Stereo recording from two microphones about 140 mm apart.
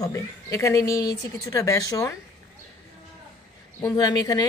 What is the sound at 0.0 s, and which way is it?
Speech, 25° left (ahead or behind).